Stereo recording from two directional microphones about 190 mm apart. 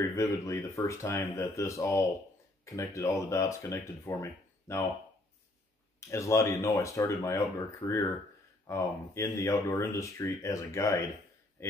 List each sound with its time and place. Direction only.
0.1 s speech: 15° left (ahead or behind)
5.9 s speech: 15° left (ahead or behind)